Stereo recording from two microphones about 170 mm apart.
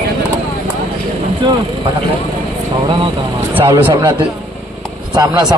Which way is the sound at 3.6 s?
25° right (ahead or behind).